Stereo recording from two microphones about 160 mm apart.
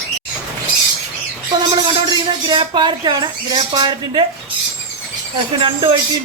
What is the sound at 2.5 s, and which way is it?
Speech, 30° right (ahead or behind).